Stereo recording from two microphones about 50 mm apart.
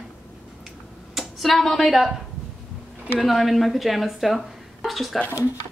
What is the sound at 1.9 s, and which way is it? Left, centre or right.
Speech, centre.